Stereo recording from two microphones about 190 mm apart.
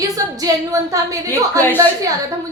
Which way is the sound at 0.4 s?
15° right (ahead or behind).